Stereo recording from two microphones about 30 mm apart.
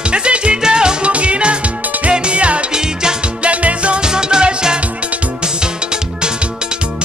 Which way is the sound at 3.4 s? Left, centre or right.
Right.